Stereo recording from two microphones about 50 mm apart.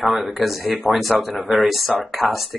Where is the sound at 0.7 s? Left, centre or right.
Right.